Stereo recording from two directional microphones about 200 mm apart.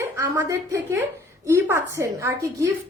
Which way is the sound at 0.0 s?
10° right (ahead or behind).